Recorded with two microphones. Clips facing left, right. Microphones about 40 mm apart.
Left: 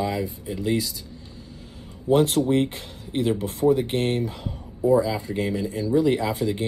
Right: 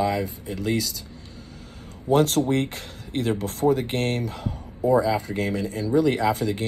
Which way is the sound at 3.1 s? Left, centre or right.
Centre.